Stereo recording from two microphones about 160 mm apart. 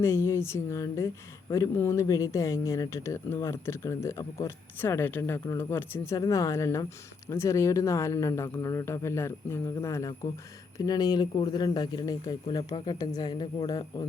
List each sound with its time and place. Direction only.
0.0 s speech: 15° left (ahead or behind)